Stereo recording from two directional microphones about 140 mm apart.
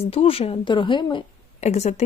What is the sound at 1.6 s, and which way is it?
Speech, 50° left (ahead or behind).